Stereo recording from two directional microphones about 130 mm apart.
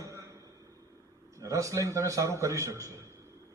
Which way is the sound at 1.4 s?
25° right (ahead or behind).